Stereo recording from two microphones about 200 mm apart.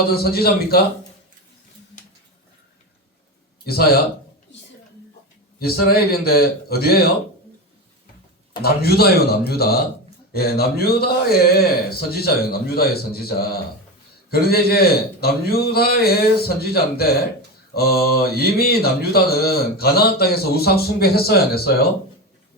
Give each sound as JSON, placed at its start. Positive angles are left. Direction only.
{"t": 0.1, "sound": "speech", "side_deg": 50}
{"t": 3.7, "sound": "speech", "side_deg": 50}
{"t": 5.5, "sound": "speech", "side_deg": 50}
{"t": 8.6, "sound": "speech", "side_deg": 50}